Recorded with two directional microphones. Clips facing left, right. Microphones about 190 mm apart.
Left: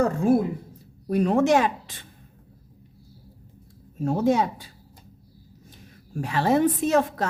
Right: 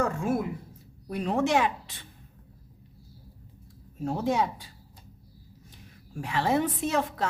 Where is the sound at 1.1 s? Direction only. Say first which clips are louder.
Left 6 dB; 45° left (ahead or behind).